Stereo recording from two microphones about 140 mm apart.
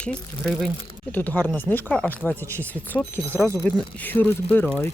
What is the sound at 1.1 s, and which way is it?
Speech, 10° left (ahead or behind).